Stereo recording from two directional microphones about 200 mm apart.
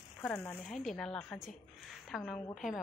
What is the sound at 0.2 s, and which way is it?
A woman's voice, 5° left (ahead or behind).